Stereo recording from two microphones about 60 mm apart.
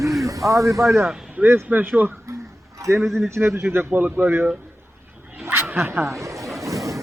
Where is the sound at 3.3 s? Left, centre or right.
Right.